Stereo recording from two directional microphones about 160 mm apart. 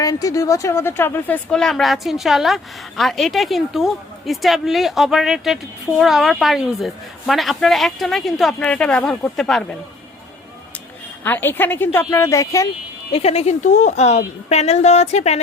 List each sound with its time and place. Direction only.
0.0 s speech: 20° left (ahead or behind); by 9.7 s centre (ahead or behind)
11.2 s a woman's voice: 10° left (ahead or behind)
13.1 s a woman's voice: 40° left (ahead or behind)